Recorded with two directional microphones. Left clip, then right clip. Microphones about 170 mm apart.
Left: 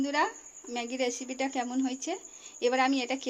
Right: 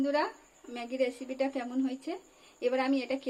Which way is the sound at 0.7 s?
75° left (ahead or behind).